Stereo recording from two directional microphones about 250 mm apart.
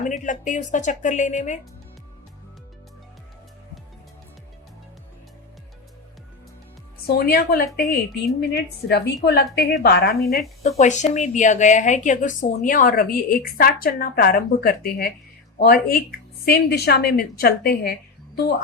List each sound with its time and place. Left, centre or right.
0.0 s speech: left
7.1 s speech: left